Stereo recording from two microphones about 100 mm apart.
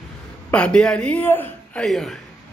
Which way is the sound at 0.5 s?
10° left (ahead or behind).